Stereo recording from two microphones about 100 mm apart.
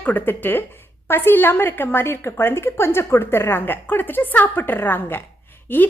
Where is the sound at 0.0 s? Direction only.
20° left (ahead or behind).